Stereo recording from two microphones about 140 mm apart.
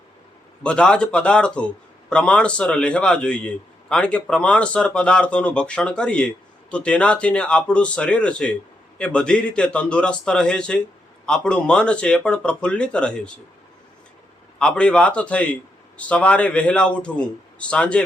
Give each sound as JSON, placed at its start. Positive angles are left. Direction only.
{"t": 0.6, "sound": "a man's voice", "side_deg": 5}
{"t": 14.6, "sound": "a man's voice", "side_deg": 10}